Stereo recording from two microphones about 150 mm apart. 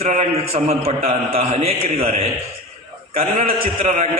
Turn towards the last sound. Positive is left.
turn(degrees=-45)  # may be behind; listen again after turning